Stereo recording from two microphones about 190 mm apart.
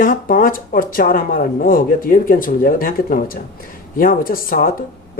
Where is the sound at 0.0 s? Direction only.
45° left (ahead or behind).